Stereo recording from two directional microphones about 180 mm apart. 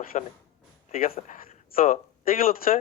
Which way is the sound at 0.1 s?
40° left (ahead or behind).